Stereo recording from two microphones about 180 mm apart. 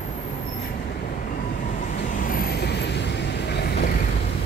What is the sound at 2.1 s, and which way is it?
Vehicle, 50° left (ahead or behind).